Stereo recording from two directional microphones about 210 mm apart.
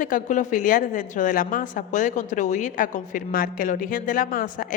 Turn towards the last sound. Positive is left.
turn(degrees=40)  # may be behind; listen again after turning